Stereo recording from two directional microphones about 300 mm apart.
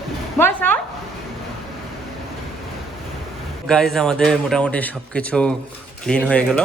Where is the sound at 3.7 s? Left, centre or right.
Centre.